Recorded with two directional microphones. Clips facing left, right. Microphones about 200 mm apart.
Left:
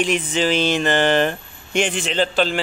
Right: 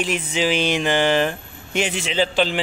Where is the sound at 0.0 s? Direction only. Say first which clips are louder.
Left 2 dB; 5° right (ahead or behind).